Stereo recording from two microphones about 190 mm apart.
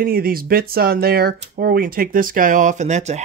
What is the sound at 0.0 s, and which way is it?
Speech, 50° right (ahead or behind).